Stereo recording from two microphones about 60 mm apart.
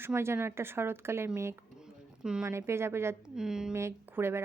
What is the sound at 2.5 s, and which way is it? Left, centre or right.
Speech, right.